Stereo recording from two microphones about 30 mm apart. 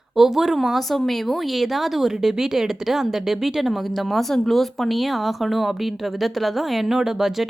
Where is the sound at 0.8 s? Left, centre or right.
Centre.